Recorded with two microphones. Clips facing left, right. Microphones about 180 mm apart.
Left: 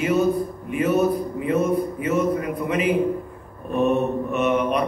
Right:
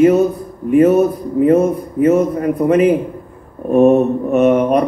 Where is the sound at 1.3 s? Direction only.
50° right (ahead or behind).